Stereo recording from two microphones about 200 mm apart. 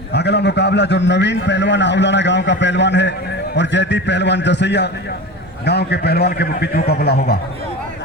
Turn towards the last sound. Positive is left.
turn(degrees=55)  # may be behind; listen again after turning